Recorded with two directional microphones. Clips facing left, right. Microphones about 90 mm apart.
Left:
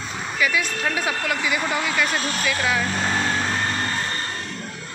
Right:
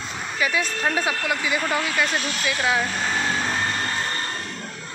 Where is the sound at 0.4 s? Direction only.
30° right (ahead or behind).